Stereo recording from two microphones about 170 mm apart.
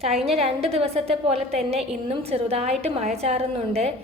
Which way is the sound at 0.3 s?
35° right (ahead or behind).